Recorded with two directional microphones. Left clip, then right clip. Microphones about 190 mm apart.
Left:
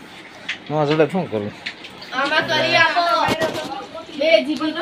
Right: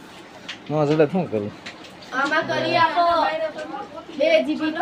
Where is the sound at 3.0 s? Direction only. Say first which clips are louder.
Even; 50° right (ahead or behind).